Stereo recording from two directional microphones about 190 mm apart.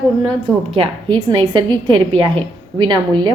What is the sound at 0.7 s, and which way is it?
A woman's voice, 25° right (ahead or behind).